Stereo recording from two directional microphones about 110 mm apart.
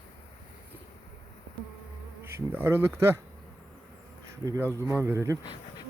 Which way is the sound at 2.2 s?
20° right (ahead or behind).